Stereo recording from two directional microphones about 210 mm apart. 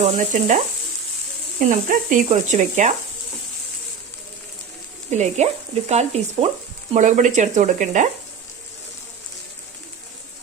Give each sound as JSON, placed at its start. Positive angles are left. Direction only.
{"t": 0.0, "sound": "speech", "side_deg": -35}
{"t": 5.1, "sound": "speech", "side_deg": -35}